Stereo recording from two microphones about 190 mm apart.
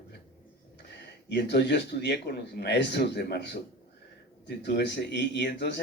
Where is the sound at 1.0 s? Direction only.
65° left (ahead or behind).